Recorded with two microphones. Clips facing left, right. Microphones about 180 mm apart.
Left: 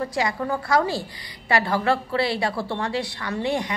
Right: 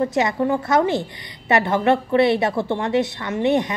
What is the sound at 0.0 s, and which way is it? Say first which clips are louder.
A woman's voice: right 6 dB; 25° right (ahead or behind).